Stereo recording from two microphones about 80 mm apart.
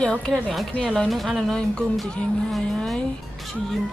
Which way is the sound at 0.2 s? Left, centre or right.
Centre.